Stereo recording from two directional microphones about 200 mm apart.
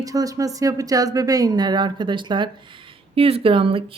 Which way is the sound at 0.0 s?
15° right (ahead or behind).